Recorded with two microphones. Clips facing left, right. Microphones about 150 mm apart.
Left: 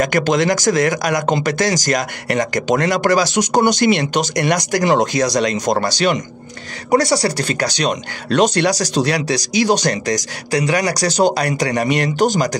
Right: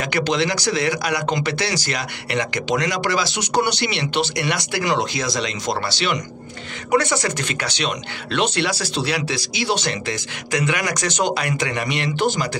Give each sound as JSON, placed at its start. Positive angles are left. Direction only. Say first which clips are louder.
{"t": 0.0, "sound": "speech", "louder": "left 5 dB", "side_deg": 45}